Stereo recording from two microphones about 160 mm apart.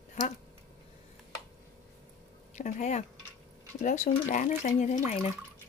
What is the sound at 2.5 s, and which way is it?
Speech, 50° left (ahead or behind).